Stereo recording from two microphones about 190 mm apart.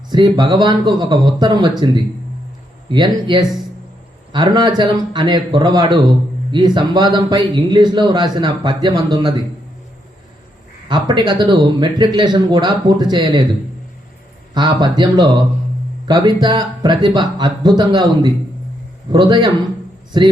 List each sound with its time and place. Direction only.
0.1 s a man's voice: 25° right (ahead or behind)
2.9 s a man's voice: 25° right (ahead or behind)
10.8 s a man's voice: 25° right (ahead or behind)